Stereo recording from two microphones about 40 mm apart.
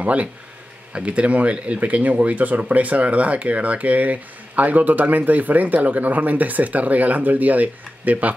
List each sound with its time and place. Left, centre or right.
0.0 s speech: right